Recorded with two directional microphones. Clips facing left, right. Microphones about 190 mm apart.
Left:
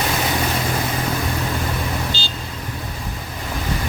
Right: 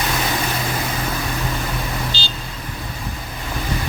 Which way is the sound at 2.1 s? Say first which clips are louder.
Left 1 dB; 50° left (ahead or behind).